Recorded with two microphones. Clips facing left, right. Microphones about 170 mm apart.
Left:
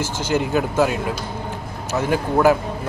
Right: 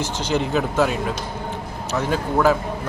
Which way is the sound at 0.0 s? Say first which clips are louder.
Left 1 dB; 5° left (ahead or behind).